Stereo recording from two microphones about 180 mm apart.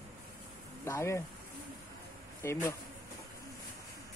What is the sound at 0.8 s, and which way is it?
Speech, 15° left (ahead or behind).